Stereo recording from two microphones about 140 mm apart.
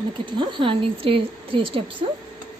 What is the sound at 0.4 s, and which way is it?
A woman's voice, 35° right (ahead or behind).